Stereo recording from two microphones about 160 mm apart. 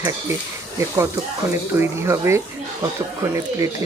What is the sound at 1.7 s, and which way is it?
Speech, 15° right (ahead or behind).